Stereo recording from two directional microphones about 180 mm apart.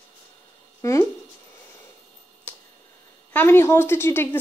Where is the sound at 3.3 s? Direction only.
10° left (ahead or behind).